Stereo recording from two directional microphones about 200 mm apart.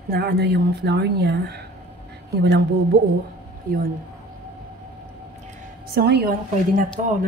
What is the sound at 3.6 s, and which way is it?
Speech, 45° right (ahead or behind).